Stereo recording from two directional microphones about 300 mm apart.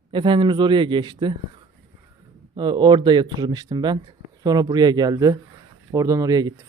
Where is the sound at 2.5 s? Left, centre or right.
Centre.